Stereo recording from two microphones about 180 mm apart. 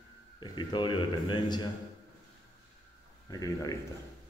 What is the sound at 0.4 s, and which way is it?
A man's voice, 25° left (ahead or behind).